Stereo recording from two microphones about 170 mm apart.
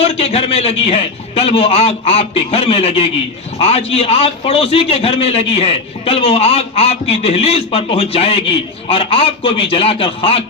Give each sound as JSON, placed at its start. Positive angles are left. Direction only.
{"t": 0.0, "sound": "a man's voice", "side_deg": 35}